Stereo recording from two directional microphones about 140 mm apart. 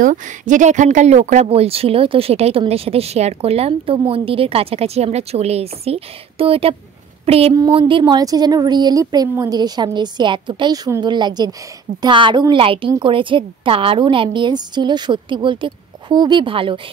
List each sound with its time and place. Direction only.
0.0 s a woman's voice: 65° right (ahead or behind); by 7.5 s 45° right (ahead or behind)
7.7 s a woman's voice: 35° right (ahead or behind)